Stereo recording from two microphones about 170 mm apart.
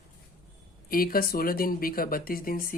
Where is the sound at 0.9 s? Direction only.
60° left (ahead or behind).